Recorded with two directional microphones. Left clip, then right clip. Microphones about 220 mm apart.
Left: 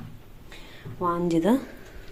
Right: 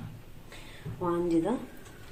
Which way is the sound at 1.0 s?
55° left (ahead or behind).